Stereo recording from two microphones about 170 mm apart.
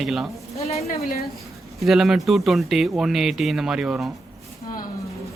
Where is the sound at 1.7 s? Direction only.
Centre (ahead or behind).